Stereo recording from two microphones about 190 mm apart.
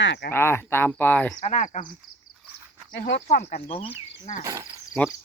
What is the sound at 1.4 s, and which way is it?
Speech, 40° left (ahead or behind).